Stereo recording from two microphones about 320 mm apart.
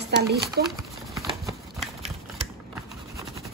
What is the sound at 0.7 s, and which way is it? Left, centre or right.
Horse, centre.